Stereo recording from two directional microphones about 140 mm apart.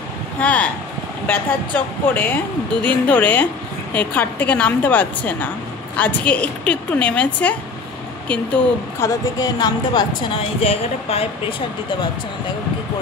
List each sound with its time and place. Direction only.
0.4 s speech: 10° left (ahead or behind)
9.0 s speech: 25° left (ahead or behind)
10.6 s speech: 45° left (ahead or behind)